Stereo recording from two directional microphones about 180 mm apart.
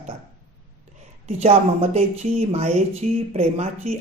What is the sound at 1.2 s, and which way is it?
Speech, 35° right (ahead or behind).